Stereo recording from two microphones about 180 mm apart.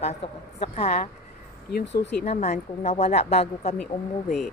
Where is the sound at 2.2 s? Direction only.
40° left (ahead or behind).